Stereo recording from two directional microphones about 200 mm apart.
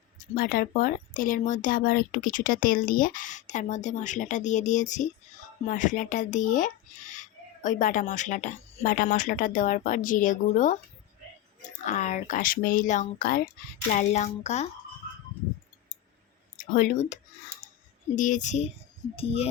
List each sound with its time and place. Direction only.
0.3 s speech: 45° left (ahead or behind)
11.9 s speech: 35° left (ahead or behind)
16.6 s speech: 40° left (ahead or behind)
18.2 s speech: 40° left (ahead or behind)